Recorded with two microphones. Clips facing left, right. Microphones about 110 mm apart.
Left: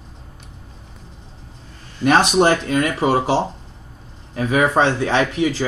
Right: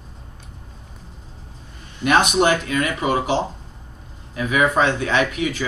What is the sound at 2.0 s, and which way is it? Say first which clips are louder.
Speech: left 2 dB; 30° left (ahead or behind).